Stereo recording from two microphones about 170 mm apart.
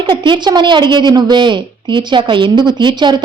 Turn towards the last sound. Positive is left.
turn(degrees=-25)  # may be behind; listen again after turning